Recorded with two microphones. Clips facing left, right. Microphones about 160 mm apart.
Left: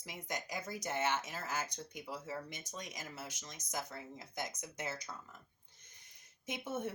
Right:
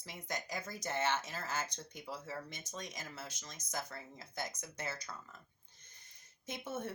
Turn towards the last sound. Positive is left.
turn(degrees=15)  # may be behind; listen again after turning